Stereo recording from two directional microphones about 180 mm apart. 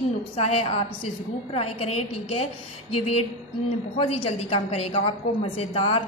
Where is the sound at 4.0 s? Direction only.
30° left (ahead or behind).